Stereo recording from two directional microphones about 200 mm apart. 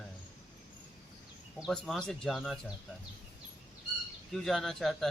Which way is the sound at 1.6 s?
5° left (ahead or behind).